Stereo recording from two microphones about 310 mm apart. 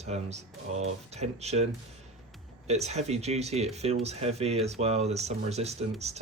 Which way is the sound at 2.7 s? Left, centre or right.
Right.